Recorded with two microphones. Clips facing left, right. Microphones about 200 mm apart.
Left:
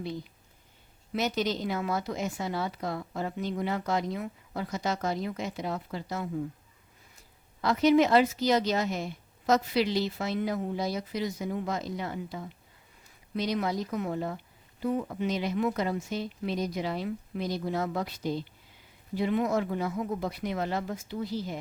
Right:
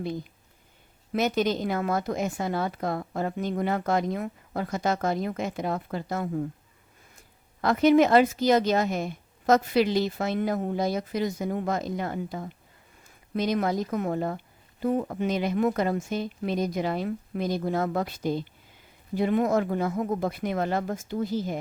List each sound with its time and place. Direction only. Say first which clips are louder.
1.1 s a woman's voice: right 4 dB; 50° right (ahead or behind)
7.6 s a woman's voice: right 3 dB; 50° right (ahead or behind)